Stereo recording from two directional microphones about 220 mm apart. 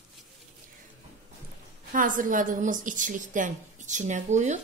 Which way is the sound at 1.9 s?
35° right (ahead or behind).